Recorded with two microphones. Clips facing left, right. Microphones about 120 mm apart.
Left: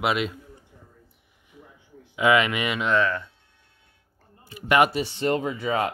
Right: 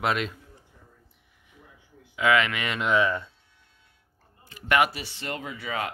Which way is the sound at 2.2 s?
15° left (ahead or behind).